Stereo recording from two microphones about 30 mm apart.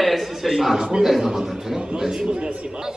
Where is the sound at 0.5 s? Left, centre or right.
Centre.